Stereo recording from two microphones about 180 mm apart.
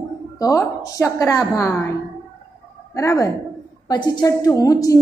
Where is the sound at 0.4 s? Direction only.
15° left (ahead or behind).